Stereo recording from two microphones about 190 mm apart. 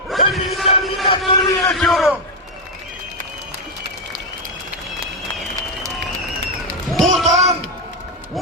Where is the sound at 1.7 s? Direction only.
Centre (ahead or behind).